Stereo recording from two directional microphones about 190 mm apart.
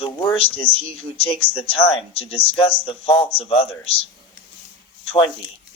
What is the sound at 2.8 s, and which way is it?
Speech, 30° left (ahead or behind).